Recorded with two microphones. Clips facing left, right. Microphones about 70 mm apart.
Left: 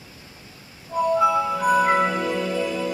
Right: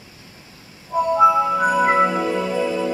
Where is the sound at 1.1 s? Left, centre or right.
Right.